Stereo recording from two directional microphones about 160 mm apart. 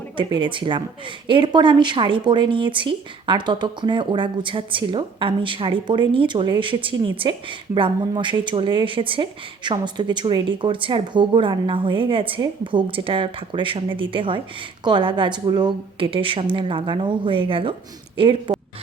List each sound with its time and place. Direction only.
0.2 s speech: 30° right (ahead or behind)